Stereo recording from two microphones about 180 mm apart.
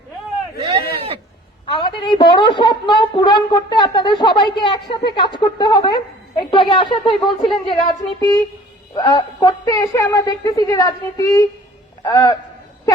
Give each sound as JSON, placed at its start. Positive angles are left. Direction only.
{"t": 1.6, "sound": "a woman's voice", "side_deg": 25}